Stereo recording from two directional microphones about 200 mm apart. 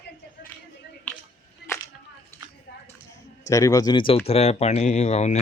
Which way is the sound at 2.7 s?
60° left (ahead or behind).